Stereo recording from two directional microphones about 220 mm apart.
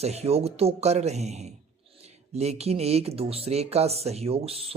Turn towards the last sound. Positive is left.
turn(degrees=-25)  # may be behind; listen again after turning